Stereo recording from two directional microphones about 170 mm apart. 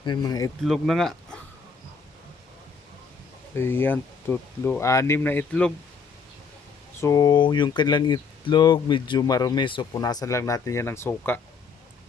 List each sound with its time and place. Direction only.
0.0 s speech: 25° left (ahead or behind)
0.6 s speech: centre (ahead or behind)
3.5 s speech: 15° left (ahead or behind)
7.0 s speech: 20° left (ahead or behind)